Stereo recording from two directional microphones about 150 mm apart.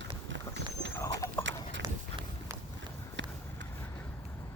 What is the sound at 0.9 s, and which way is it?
Horse, 15° left (ahead or behind).